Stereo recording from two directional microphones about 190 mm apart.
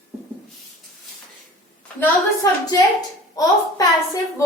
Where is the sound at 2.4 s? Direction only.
20° left (ahead or behind).